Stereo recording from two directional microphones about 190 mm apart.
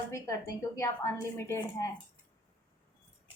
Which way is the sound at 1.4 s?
15° left (ahead or behind).